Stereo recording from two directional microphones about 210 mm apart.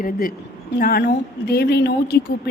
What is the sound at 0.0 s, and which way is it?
A woman's voice, 40° left (ahead or behind).